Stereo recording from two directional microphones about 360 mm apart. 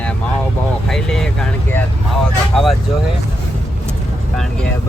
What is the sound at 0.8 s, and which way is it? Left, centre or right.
Speech, centre.